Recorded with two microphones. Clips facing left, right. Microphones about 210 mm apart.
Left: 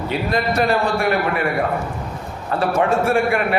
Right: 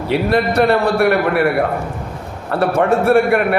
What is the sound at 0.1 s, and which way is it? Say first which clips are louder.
A man's voice: right 6 dB; 65° right (ahead or behind).